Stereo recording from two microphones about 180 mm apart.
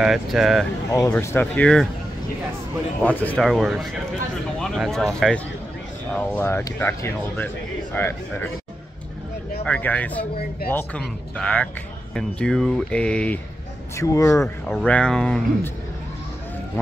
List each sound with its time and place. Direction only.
0.0 s speech: centre (ahead or behind)
0.9 s speech: 15° left (ahead or behind)
3.0 s speech: 10° left (ahead or behind)
9.7 s speech: 10° left (ahead or behind)
13.9 s speech: 15° left (ahead or behind)
14.4 s speech: centre (ahead or behind)
16.8 s speech: 10° left (ahead or behind)